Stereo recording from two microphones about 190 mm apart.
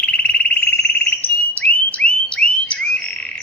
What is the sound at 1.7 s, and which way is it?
Alarm, 10° left (ahead or behind).